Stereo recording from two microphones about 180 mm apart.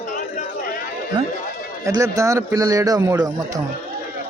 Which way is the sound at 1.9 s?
15° right (ahead or behind).